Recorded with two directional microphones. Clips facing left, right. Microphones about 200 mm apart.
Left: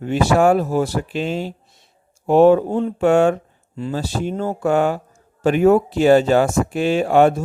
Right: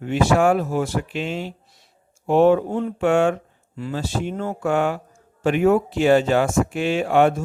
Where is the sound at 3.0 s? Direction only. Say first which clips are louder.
Left 3 dB; 40° left (ahead or behind).